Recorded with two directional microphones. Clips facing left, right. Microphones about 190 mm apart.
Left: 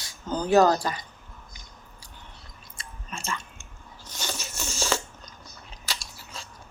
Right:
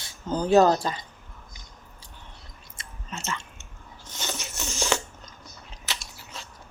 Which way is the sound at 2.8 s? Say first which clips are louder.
Right 1 dB; 20° right (ahead or behind).